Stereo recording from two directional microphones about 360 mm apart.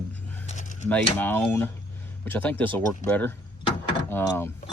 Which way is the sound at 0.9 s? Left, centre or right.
Centre.